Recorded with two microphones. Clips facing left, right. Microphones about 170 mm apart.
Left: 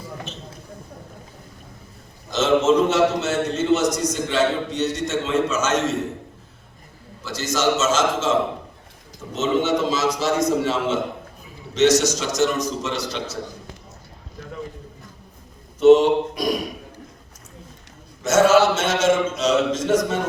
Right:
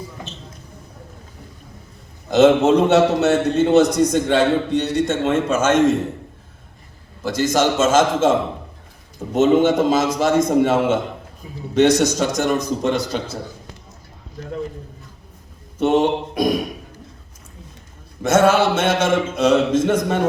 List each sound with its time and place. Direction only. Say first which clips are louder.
2.3 s a man's voice: right 5 dB; 60° right (ahead or behind)
7.2 s a man's voice: right 6 dB; 50° right (ahead or behind)
15.8 s a man's voice: left 4 dB; 55° right (ahead or behind)
18.2 s a man's voice: even; 55° right (ahead or behind)